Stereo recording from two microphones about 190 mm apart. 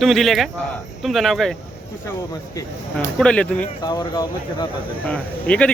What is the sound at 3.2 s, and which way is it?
Speech, 5° left (ahead or behind).